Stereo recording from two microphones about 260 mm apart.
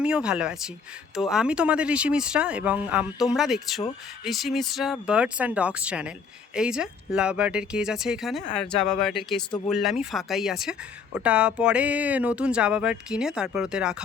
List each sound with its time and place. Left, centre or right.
0.0 s speech: centre